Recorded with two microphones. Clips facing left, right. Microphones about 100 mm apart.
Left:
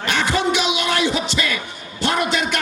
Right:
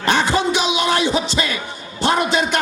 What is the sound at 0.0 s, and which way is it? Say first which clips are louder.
Music: right 3 dB; 30° right (ahead or behind).